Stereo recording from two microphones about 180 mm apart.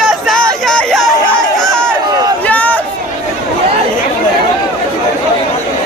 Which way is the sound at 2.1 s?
20° right (ahead or behind).